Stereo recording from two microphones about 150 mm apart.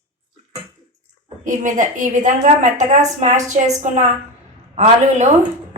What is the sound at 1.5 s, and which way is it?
A woman's voice, 60° right (ahead or behind).